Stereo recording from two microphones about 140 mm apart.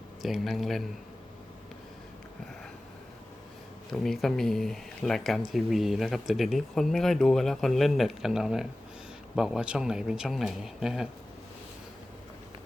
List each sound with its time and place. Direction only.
0.2 s speech: centre (ahead or behind)
3.9 s speech: 5° left (ahead or behind)